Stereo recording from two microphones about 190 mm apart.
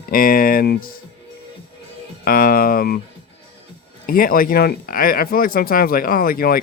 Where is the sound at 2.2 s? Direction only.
50° left (ahead or behind).